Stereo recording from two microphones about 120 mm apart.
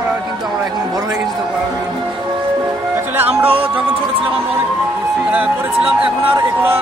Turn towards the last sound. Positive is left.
turn(degrees=-10)  # may be behind; listen again after turning